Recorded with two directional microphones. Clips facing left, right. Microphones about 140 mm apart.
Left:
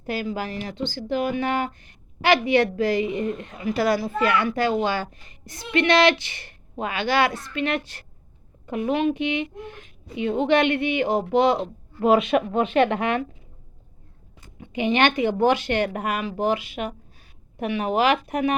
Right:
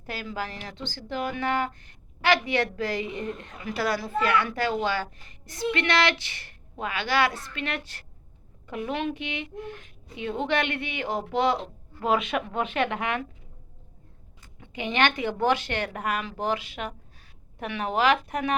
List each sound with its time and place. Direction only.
0.0 s a child's voice: 15° left (ahead or behind)
12.0 s a child's voice: 30° left (ahead or behind)
14.6 s speech: 15° left (ahead or behind)